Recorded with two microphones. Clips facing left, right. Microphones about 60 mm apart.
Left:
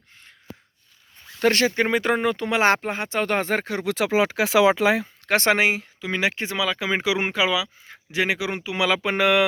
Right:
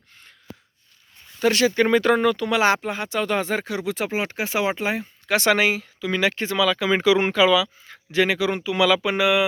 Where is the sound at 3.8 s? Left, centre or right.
Left.